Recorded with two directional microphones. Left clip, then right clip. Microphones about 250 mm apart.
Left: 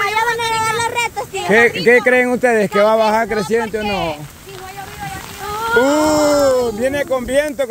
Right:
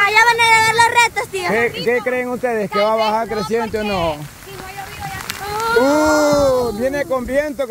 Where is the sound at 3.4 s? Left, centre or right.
Centre.